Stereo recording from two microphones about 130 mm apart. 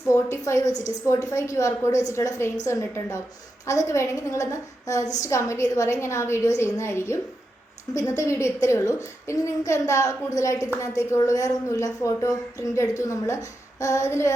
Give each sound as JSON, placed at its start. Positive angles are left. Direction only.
{"t": 0.1, "sound": "a woman's voice", "side_deg": 20}
{"t": 1.9, "sound": "a woman's voice", "side_deg": 65}
{"t": 2.1, "sound": "a woman's voice", "side_deg": 25}